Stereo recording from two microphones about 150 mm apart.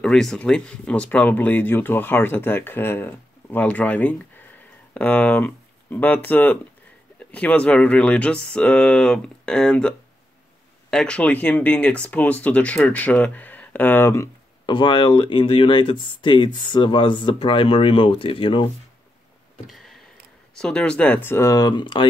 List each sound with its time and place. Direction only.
0.0 s speech: 5° left (ahead or behind)
14.7 s speech: 30° left (ahead or behind)
19.7 s tick-tock: centre (ahead or behind)
20.5 s speech: 5° left (ahead or behind); by 22.0 s 30° left (ahead or behind)